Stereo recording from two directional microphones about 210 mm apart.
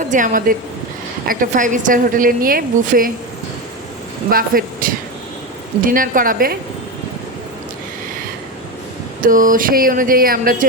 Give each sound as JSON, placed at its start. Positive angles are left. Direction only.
{"t": 0.0, "sound": "a woman's voice", "side_deg": -35}
{"t": 4.3, "sound": "a woman's voice", "side_deg": -45}
{"t": 9.2, "sound": "a woman's voice", "side_deg": -40}